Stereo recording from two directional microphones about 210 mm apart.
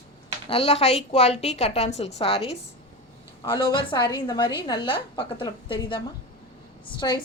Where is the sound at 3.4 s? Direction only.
25° left (ahead or behind).